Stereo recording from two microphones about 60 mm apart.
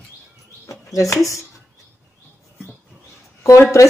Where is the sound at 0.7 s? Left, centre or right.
Left.